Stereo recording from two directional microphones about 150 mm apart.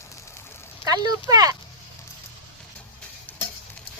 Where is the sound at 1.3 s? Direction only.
25° right (ahead or behind).